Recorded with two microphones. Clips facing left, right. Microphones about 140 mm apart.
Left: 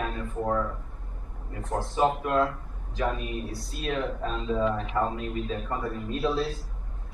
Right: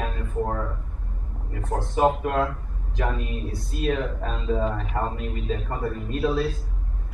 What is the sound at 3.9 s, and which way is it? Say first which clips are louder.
Speech: right 2 dB; 45° right (ahead or behind).